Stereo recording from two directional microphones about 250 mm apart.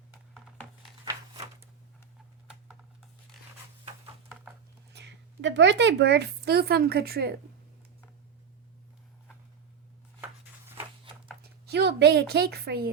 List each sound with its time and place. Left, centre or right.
4.9 s a woman's voice: right
11.7 s a woman's voice: right